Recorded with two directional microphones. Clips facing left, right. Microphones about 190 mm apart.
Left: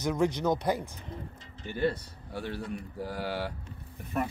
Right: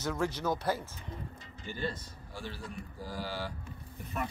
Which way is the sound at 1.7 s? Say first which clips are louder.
Left 8 dB; 65° left (ahead or behind).